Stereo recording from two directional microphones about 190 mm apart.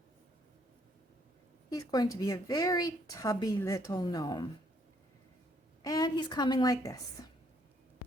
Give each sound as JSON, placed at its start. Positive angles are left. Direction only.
{"t": 1.7, "sound": "speech", "side_deg": 20}
{"t": 5.8, "sound": "a woman's voice", "side_deg": 20}